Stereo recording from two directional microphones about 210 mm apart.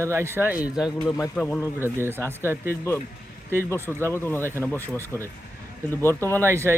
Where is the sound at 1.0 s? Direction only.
10° left (ahead or behind).